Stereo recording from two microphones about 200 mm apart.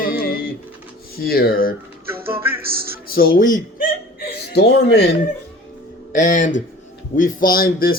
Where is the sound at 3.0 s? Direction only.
50° left (ahead or behind).